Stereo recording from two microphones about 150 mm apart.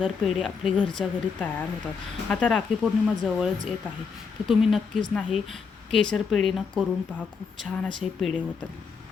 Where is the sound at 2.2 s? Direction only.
5° left (ahead or behind).